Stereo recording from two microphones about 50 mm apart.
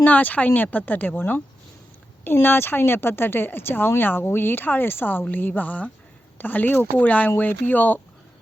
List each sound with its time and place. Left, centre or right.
0.0 s speech: left